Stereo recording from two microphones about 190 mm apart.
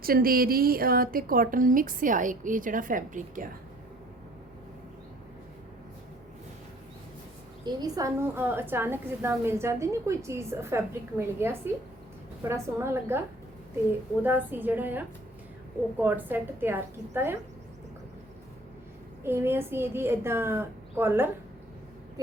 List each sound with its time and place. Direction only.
0.0 s a woman's voice: 50° right (ahead or behind)
7.6 s a woman's voice: 20° right (ahead or behind)
12.8 s a woman's voice: 15° right (ahead or behind)
19.2 s a woman's voice: 10° right (ahead or behind)